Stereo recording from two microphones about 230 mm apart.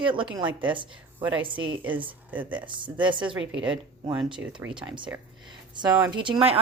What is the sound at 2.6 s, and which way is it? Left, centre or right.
Speech, right.